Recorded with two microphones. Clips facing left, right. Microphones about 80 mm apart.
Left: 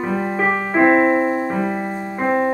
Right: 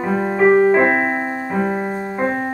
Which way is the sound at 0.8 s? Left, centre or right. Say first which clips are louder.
Left 4 dB; centre.